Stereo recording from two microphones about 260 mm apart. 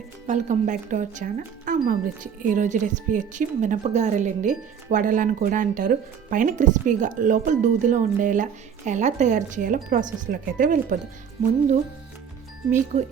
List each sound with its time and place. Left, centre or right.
0.3 s speech: right
12.7 s speech: right